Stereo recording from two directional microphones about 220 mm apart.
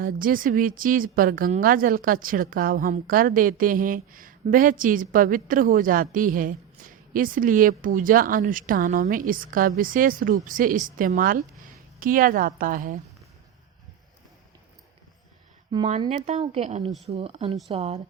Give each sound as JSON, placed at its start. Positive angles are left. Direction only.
{"t": 0.0, "sound": "a woman's voice", "side_deg": -40}
{"t": 15.7, "sound": "speech", "side_deg": -20}